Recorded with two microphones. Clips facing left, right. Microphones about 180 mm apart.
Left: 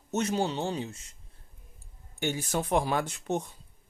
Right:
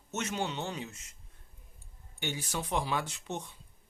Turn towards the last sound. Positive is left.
turn(degrees=45)  # may be behind; listen again after turning